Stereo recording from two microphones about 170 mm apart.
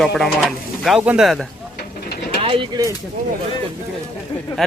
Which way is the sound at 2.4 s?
30° right (ahead or behind).